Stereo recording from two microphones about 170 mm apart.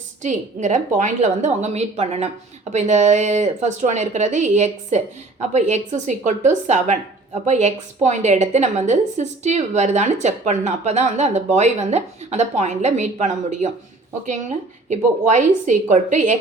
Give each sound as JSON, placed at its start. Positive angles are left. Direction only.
{"t": 0.2, "sound": "a woman's voice", "side_deg": -45}
{"t": 14.8, "sound": "a woman's voice", "side_deg": -45}